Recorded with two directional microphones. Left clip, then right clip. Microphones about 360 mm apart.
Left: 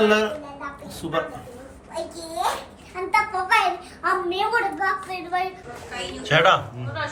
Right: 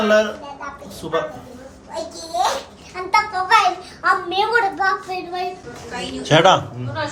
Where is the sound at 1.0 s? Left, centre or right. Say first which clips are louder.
Right 4 dB; centre.